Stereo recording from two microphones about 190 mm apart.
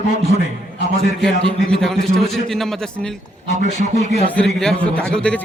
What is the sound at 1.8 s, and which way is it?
A man's voice, 5° left (ahead or behind).